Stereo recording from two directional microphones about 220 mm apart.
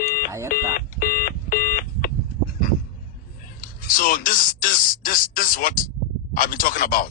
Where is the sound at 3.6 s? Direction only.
40° left (ahead or behind).